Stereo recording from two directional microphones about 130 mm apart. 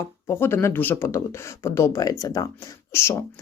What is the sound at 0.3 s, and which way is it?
Speech, 20° left (ahead or behind).